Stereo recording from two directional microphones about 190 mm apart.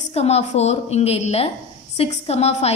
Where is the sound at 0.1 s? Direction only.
35° left (ahead or behind).